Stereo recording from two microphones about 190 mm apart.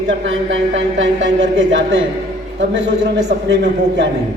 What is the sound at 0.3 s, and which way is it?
Speech, 85° right.